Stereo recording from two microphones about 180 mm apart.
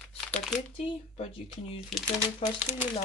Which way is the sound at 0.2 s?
5° left (ahead or behind).